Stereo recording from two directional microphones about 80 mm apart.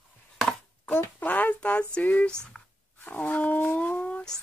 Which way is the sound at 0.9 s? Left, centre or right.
Left.